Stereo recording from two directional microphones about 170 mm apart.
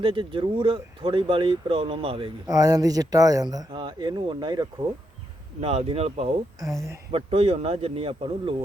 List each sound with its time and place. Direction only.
0.0 s speech: 30° right (ahead or behind)
2.5 s speech: 20° right (ahead or behind)
5.5 s speech: 35° right (ahead or behind)